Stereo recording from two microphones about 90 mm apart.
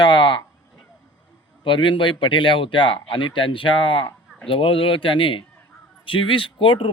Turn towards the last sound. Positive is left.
turn(degrees=70)  # may be behind; listen again after turning